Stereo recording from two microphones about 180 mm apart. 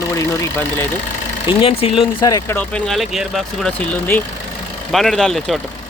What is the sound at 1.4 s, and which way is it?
Speech, 30° left (ahead or behind).